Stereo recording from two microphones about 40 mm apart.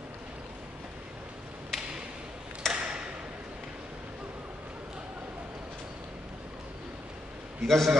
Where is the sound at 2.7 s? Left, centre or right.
Right.